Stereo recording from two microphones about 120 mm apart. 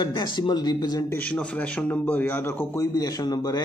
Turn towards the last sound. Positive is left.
turn(degrees=35)  # may be behind; listen again after turning